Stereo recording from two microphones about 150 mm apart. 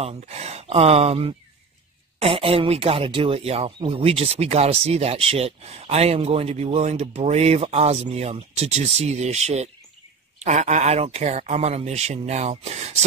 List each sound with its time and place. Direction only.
0.0 s speech: 45° right (ahead or behind)